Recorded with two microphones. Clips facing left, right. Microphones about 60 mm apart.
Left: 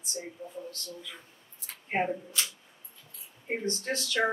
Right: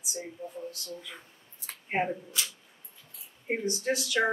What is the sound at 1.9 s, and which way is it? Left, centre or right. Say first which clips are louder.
Speech: even; centre.